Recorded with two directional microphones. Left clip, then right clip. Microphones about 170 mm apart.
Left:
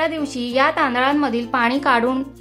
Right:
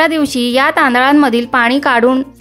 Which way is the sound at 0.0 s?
50° right (ahead or behind).